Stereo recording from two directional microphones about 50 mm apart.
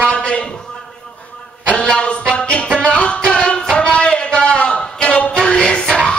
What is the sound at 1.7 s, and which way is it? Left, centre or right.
Speech, centre.